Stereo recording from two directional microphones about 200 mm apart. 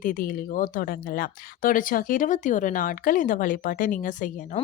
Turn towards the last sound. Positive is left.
turn(degrees=40)  # may be behind; listen again after turning